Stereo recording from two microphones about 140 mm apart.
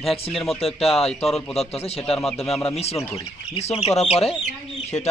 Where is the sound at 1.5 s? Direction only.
45° left (ahead or behind).